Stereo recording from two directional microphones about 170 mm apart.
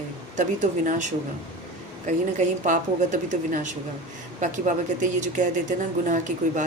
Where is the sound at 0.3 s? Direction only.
45° right (ahead or behind).